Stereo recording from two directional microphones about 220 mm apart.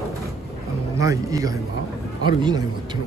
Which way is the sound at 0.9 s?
15° right (ahead or behind).